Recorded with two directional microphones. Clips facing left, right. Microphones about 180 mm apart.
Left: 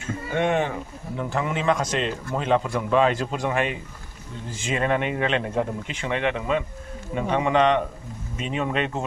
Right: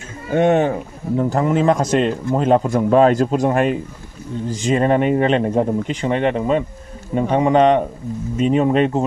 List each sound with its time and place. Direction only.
0.3 s speech: 40° right (ahead or behind)